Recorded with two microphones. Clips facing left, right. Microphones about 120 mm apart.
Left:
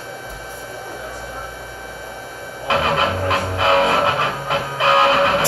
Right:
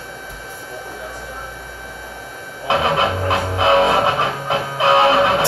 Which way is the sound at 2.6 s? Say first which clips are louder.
Right 1 dB; 20° right (ahead or behind).